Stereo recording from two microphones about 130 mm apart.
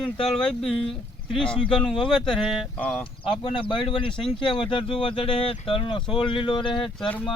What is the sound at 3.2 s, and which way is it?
Speech, 35° left (ahead or behind).